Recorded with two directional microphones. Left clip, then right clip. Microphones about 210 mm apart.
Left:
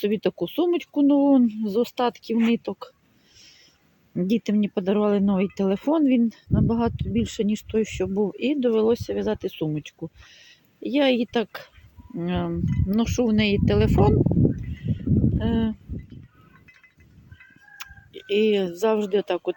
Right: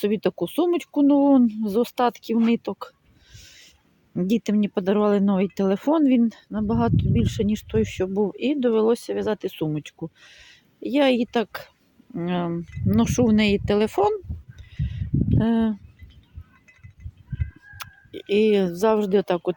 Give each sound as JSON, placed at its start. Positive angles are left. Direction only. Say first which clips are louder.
{"t": 0.0, "sound": "speech", "louder": "right 1 dB", "side_deg": -5}
{"t": 3.3, "sound": "a sound", "louder": "right 3 dB", "side_deg": -10}
{"t": 4.1, "sound": "speech", "louder": "right 1 dB", "side_deg": -5}
{"t": 17.7, "sound": "speech", "louder": "right 3 dB", "side_deg": -10}